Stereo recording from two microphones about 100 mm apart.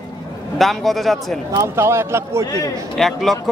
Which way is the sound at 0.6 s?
Centre (ahead or behind).